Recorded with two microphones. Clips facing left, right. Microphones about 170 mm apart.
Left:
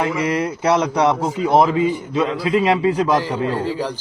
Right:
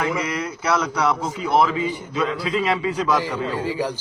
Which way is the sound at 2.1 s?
25° left (ahead or behind).